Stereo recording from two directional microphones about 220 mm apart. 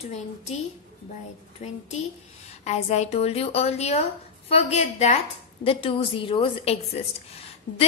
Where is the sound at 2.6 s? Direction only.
30° left (ahead or behind).